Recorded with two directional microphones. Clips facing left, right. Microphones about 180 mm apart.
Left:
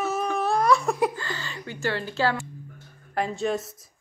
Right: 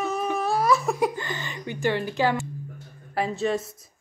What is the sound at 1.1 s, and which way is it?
Speech, 20° right (ahead or behind).